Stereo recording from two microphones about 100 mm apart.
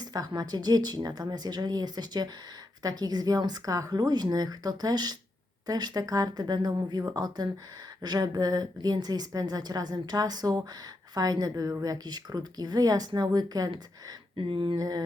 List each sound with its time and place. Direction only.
0.0 s a woman's voice: 40° right (ahead or behind)
14.3 s a sound: 55° right (ahead or behind)
14.8 s a woman's voice: 40° right (ahead or behind)